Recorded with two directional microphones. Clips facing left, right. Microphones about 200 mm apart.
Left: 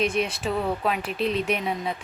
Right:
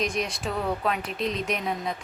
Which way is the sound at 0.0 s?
5° left (ahead or behind).